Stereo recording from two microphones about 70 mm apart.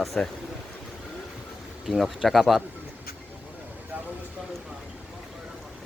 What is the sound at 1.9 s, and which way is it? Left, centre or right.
Speech, centre.